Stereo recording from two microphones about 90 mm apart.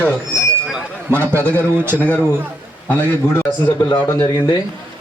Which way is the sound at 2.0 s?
15° left (ahead or behind).